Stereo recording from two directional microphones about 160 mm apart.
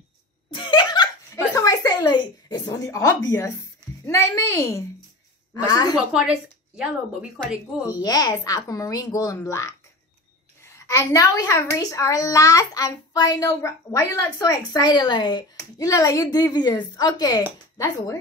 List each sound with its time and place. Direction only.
0.5 s a sound: 30° left (ahead or behind)
4.0 s a woman's voice: 20° left (ahead or behind)
6.1 s a woman's voice: 5° right (ahead or behind)
7.9 s a woman's voice: 25° left (ahead or behind)